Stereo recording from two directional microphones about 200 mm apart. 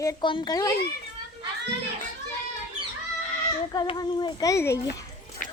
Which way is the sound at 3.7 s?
20° left (ahead or behind).